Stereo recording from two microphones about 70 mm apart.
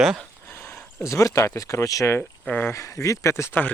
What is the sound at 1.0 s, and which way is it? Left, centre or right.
Speech, left.